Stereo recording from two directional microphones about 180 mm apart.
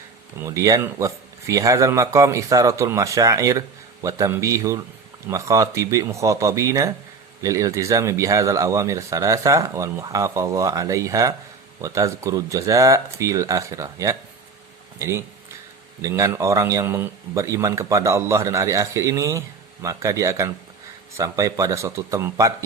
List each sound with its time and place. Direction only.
0.3 s a man's voice: 15° right (ahead or behind)